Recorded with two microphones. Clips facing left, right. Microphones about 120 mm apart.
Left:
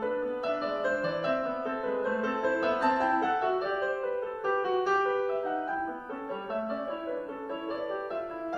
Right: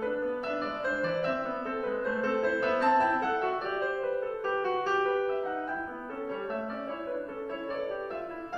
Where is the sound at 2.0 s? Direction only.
10° left (ahead or behind).